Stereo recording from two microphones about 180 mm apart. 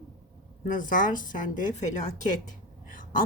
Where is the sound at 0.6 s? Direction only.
50° left (ahead or behind).